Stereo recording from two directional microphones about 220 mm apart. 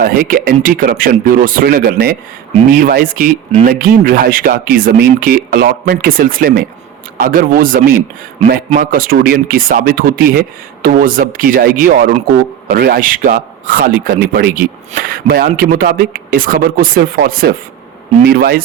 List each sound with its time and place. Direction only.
0.0 s speech: 40° right (ahead or behind)